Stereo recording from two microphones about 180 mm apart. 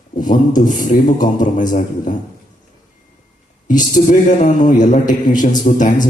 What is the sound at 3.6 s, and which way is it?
A man's voice, 45° left (ahead or behind).